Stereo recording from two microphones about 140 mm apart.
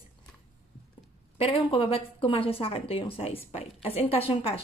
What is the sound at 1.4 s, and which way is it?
Speech, 40° left (ahead or behind).